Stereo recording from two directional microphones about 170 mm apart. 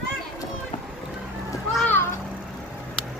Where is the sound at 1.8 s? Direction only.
10° left (ahead or behind).